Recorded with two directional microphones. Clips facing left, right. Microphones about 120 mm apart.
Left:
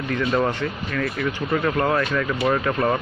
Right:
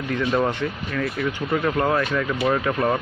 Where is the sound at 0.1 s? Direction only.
10° right (ahead or behind).